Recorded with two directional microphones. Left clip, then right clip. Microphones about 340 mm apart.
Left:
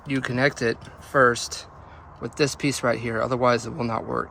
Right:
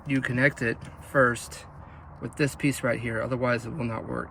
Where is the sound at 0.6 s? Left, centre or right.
Centre.